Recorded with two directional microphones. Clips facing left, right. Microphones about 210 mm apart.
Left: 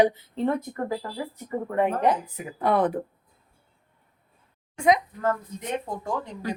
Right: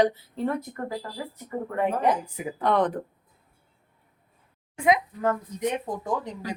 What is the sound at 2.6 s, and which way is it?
Speech, 10° left (ahead or behind).